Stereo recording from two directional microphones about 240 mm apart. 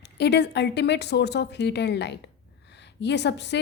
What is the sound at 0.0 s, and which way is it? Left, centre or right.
A woman's voice, left.